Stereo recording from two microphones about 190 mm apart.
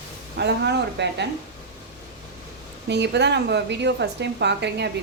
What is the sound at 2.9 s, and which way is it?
A woman's voice, 65° right (ahead or behind).